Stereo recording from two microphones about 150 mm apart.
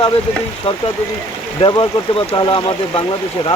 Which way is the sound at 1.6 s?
35° left (ahead or behind).